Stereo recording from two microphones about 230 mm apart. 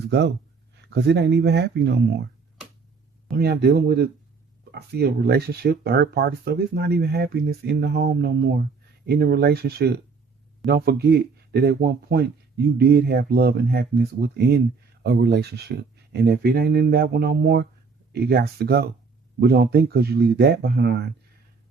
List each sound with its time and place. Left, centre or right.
0.1 s speech: right
3.3 s speech: right